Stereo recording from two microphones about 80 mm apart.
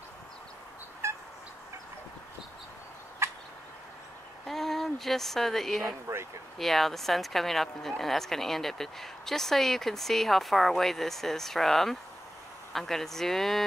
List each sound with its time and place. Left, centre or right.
1.0 s fowl: right
3.2 s turkey: right
4.5 s speech: centre
6.0 s speech: right
6.6 s speech: centre